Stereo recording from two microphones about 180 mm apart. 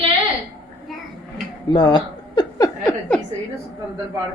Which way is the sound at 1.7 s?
25° left (ahead or behind).